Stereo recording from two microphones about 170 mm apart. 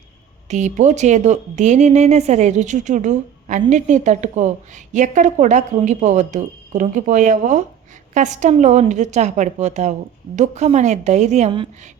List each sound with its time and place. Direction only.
0.4 s speech: 45° right (ahead or behind)